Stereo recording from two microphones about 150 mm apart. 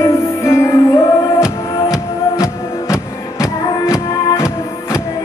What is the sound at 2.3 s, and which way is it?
Music, 20° left (ahead or behind).